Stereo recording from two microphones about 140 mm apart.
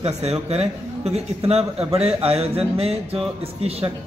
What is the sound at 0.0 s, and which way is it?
Speech, 50° right (ahead or behind).